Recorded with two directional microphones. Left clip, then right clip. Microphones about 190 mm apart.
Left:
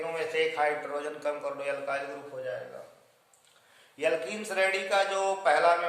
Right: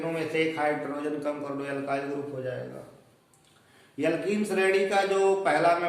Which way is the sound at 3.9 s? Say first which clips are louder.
Right 2 dB; 25° left (ahead or behind).